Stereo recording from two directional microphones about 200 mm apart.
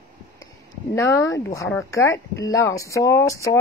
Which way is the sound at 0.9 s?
15° left (ahead or behind).